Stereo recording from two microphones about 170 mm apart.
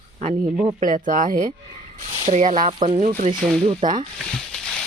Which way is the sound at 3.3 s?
25° right (ahead or behind).